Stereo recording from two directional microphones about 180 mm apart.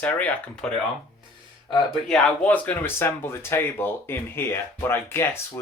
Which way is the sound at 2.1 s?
5° left (ahead or behind).